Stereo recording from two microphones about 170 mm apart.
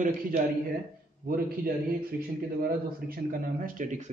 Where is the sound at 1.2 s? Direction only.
60° right (ahead or behind).